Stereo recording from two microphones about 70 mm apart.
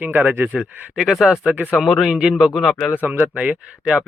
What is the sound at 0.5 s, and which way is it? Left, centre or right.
Speech, centre.